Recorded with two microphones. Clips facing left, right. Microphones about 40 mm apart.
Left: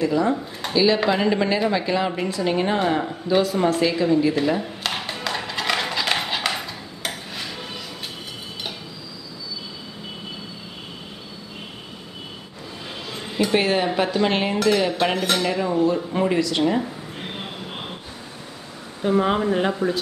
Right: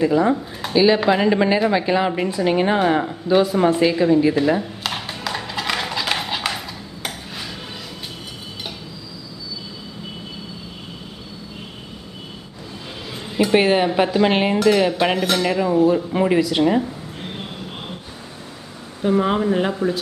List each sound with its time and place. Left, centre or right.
0.0 s speech: right
4.8 s clip-clop: centre
13.1 s a sound: centre
13.9 s speech: centre
14.6 s dishes: centre
15.7 s speech: centre
18.9 s dishes: centre